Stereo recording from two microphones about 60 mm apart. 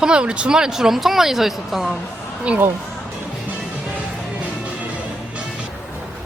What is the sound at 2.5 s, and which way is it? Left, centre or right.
Speech, centre.